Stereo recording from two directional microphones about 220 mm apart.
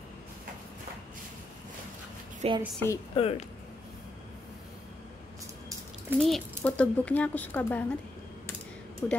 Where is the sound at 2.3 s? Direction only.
25° right (ahead or behind).